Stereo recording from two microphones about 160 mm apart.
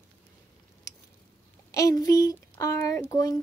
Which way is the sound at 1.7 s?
20° left (ahead or behind).